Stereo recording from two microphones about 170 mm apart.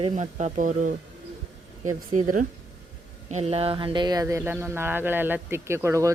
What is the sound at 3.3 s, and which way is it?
Speech, 40° right (ahead or behind).